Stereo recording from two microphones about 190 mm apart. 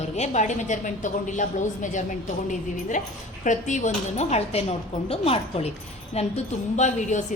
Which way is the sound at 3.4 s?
40° left (ahead or behind).